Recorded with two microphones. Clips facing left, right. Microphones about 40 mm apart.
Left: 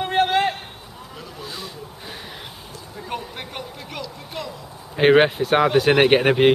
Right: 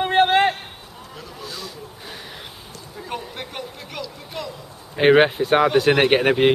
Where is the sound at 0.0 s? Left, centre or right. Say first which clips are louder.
Right 3 dB; right.